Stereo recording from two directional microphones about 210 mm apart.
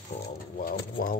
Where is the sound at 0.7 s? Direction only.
40° left (ahead or behind).